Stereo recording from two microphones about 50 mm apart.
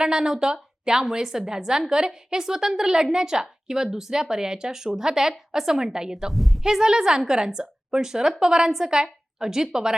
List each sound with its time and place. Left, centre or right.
0.0 s a woman's voice: centre
6.3 s a woman's voice: centre